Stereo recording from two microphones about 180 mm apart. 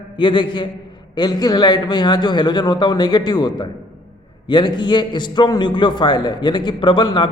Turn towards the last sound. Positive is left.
turn(degrees=25)  # may be behind; listen again after turning